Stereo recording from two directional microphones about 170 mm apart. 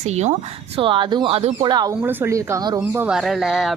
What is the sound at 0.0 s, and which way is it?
Speech, 40° right (ahead or behind).